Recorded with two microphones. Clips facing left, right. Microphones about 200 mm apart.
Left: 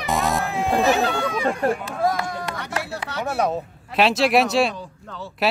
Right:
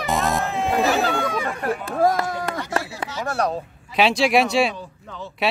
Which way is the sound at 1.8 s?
50° right (ahead or behind).